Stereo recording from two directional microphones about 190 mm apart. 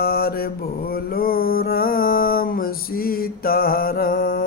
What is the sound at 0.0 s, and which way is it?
Mantra, 55° left (ahead or behind).